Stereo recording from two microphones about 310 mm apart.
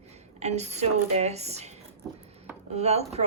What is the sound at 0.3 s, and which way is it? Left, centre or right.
Speech, right.